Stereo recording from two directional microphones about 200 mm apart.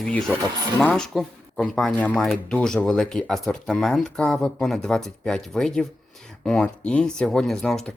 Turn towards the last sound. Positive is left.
turn(degrees=0)  # may be behind; listen again after turning